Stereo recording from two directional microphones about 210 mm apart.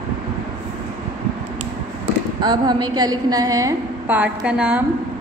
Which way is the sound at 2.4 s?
20° right (ahead or behind).